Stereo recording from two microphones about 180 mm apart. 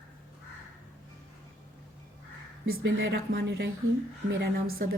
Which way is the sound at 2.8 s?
80° right.